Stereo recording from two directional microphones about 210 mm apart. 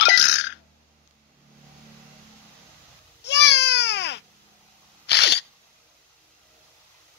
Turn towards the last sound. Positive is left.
turn(degrees=55)  # may be behind; listen again after turning